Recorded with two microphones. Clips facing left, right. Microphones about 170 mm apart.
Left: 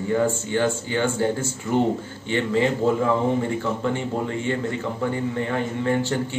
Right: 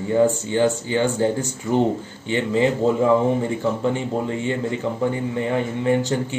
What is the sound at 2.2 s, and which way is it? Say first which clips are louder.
Speech: right 1 dB; 15° right (ahead or behind).